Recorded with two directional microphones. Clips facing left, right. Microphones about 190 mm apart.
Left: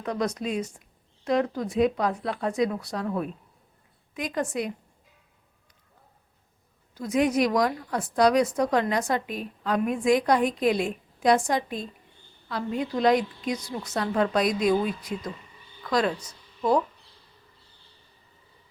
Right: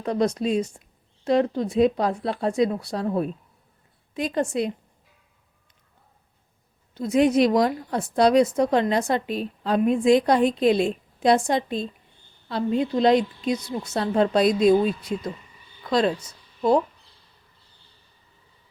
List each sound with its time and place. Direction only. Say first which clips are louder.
0.0 s a woman's voice: right 5 dB; 30° right (ahead or behind)
6.9 s a woman's voice: right 4 dB; 25° right (ahead or behind)